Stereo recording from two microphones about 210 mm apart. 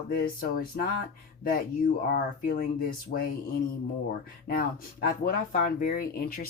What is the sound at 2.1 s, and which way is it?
Speech, 45° left (ahead or behind).